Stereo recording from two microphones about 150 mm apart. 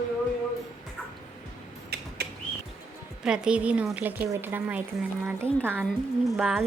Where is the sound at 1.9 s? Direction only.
90° right.